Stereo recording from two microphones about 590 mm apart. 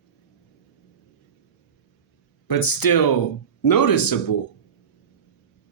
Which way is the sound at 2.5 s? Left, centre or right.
Left.